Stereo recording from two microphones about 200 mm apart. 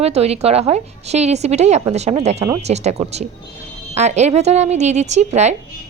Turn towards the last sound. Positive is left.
turn(degrees=-35)  # may be behind; listen again after turning